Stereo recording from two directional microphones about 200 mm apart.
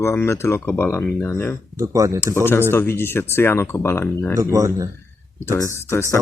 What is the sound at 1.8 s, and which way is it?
Speech, 15° right (ahead or behind).